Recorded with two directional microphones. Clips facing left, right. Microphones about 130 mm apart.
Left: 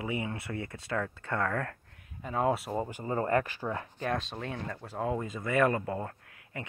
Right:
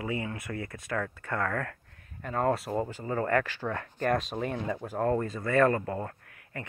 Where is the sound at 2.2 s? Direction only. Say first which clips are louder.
Right 1 dB; 5° left (ahead or behind).